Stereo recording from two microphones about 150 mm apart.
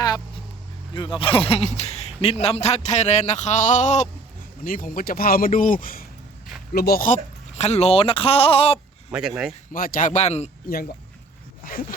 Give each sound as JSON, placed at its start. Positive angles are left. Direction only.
{"t": 0.9, "sound": "a man's voice", "side_deg": 35}
{"t": 4.6, "sound": "speech", "side_deg": 70}
{"t": 6.7, "sound": "speech", "side_deg": 90}
{"t": 9.0, "sound": "speech", "side_deg": -5}
{"t": 9.7, "sound": "a man's voice", "side_deg": 70}
{"t": 10.7, "sound": "speech", "side_deg": 75}